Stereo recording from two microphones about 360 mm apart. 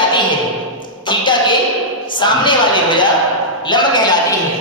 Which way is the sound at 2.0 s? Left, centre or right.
Centre.